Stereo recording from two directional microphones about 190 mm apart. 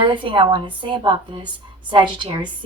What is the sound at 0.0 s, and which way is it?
A woman's voice, 25° right (ahead or behind).